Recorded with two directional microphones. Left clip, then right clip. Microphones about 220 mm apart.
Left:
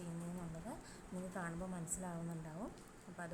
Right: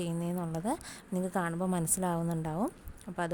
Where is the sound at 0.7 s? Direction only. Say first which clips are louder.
Right 15 dB; 40° right (ahead or behind).